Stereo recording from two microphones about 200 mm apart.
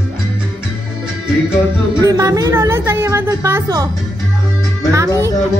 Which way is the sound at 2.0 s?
15° right (ahead or behind).